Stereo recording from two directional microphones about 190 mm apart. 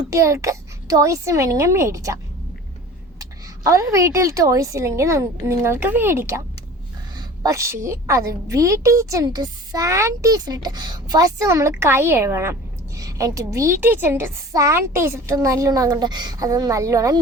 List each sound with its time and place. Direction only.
0.1 s a woman's voice: 15° right (ahead or behind)
3.2 s a woman's voice: 20° right (ahead or behind)